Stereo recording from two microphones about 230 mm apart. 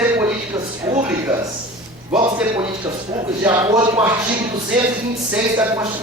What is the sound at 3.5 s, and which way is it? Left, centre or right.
Speech, centre.